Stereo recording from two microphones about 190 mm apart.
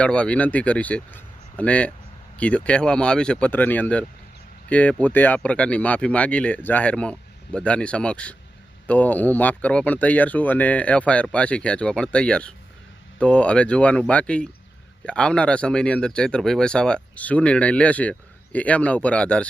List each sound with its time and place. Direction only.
0.0 s speech: 5° left (ahead or behind)